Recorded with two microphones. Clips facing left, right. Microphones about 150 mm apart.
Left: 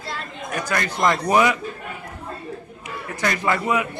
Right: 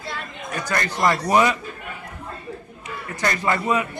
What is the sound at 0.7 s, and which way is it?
Speech, 10° left (ahead or behind).